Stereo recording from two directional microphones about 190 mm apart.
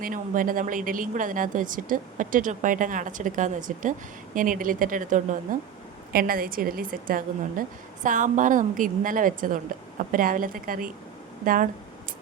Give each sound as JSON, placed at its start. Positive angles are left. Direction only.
{"t": 0.0, "sound": "a woman's voice", "side_deg": -45}